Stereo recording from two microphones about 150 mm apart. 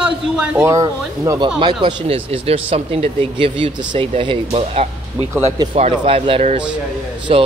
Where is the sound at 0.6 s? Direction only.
20° right (ahead or behind).